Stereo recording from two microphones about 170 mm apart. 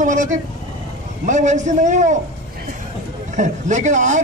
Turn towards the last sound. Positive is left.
turn(degrees=-45)  # may be behind; listen again after turning